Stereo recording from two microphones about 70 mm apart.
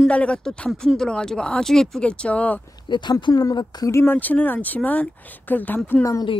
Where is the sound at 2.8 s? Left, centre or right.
Left.